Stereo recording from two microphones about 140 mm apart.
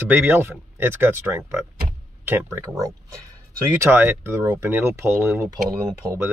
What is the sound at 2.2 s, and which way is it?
Speech, 15° right (ahead or behind).